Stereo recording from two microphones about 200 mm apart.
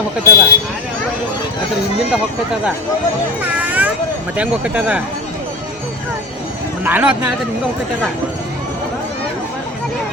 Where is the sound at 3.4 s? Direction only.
10° right (ahead or behind).